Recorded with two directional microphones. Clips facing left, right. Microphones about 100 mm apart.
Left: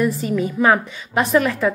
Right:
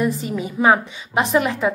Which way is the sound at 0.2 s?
15° right (ahead or behind).